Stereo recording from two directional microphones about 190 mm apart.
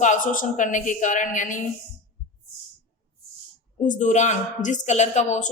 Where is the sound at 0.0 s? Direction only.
40° left (ahead or behind).